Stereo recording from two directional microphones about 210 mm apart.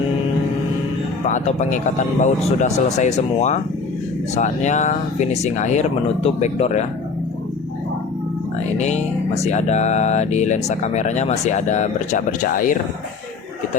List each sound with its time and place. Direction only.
1.2 s speech: 35° left (ahead or behind)
8.8 s speech: 30° left (ahead or behind)